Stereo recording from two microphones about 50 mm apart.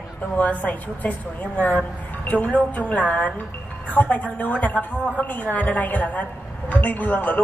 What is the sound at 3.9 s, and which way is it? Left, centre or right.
Music, left.